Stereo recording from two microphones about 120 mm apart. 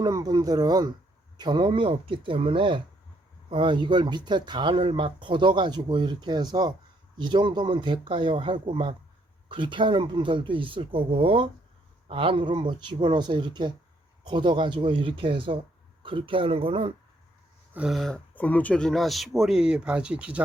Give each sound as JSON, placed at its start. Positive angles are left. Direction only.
{"t": 0.0, "sound": "speech", "side_deg": -30}
{"t": 17.7, "sound": "speech", "side_deg": 0}
{"t": 18.3, "sound": "speech", "side_deg": 15}